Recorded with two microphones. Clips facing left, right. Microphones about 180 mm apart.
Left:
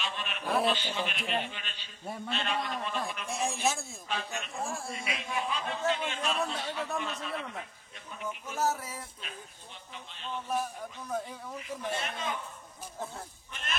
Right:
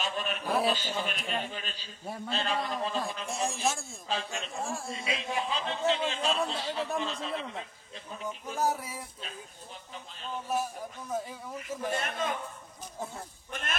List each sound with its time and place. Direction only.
0.0 s a man's voice: 40° right (ahead or behind)
3.3 s speech: centre (ahead or behind)
4.1 s a man's voice: 30° right (ahead or behind)
4.6 s speech: centre (ahead or behind)
4.9 s a man's voice: 30° right (ahead or behind)
8.5 s a sound: 15° right (ahead or behind)
10.5 s speech: 5° right (ahead or behind)
11.6 s speech: 50° right (ahead or behind)
13.5 s speech: 50° right (ahead or behind)